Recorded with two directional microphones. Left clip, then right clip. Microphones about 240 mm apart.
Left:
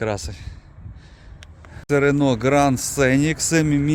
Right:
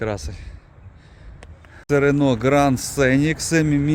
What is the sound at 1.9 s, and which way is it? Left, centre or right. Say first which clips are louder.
Speech: even; centre.